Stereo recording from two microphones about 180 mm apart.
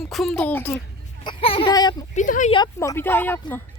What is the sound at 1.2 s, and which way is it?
Speech, 30° left (ahead or behind).